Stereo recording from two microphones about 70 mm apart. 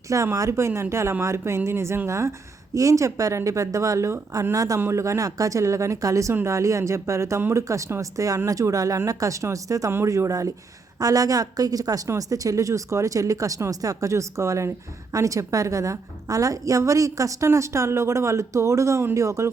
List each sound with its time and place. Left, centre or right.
0.3 s a woman's voice: right
4.8 s a woman's voice: right
9.9 s a woman's voice: right